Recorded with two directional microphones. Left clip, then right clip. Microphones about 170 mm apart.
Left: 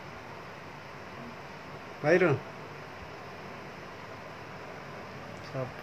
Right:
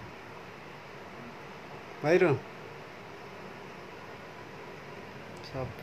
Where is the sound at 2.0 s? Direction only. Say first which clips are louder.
Even; 15° right (ahead or behind).